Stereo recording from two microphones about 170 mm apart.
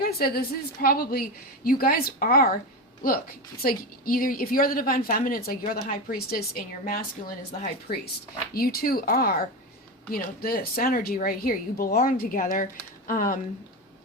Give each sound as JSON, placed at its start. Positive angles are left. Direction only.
{"t": 0.0, "sound": "a woman's voice", "side_deg": 65}
{"t": 10.4, "sound": "a woman's voice", "side_deg": 60}